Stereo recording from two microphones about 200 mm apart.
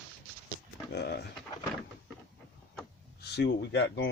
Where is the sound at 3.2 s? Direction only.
60° left (ahead or behind).